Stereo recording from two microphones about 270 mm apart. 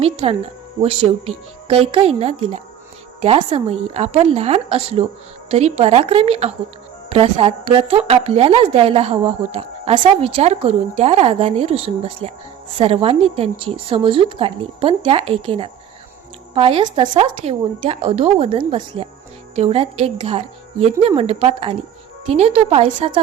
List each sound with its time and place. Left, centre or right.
0.0 s speech: right